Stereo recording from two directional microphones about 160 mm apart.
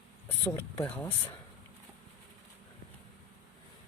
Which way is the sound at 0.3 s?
15° left (ahead or behind).